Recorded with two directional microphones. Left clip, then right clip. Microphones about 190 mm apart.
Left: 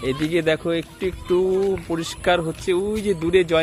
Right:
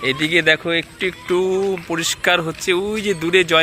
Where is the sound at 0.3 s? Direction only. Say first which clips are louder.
Right 5 dB; 15° left (ahead or behind).